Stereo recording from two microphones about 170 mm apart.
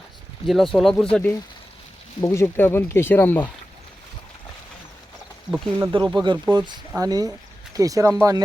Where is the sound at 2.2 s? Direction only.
15° left (ahead or behind).